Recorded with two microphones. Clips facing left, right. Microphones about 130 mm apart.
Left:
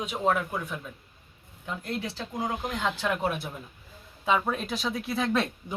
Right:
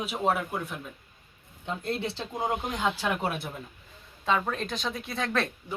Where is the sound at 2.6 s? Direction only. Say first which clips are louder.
Even; 5° right (ahead or behind).